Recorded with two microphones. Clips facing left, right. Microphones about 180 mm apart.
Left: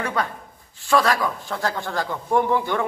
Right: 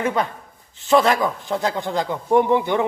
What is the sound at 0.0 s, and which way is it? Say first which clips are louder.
Speech: right 4 dB; 20° right (ahead or behind).